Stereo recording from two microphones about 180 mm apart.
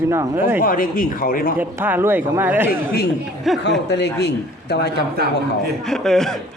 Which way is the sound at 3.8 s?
70° left (ahead or behind).